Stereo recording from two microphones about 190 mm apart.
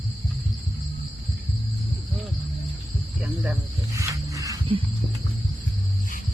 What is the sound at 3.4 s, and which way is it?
Cricket, 10° right (ahead or behind).